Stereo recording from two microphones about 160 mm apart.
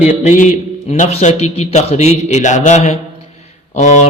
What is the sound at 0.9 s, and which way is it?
A man's voice, 45° left (ahead or behind).